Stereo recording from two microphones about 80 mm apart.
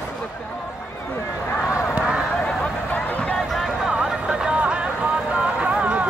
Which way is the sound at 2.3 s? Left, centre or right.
Centre.